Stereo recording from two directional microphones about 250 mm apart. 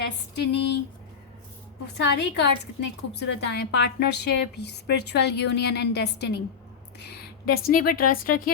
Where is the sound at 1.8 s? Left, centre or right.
Left.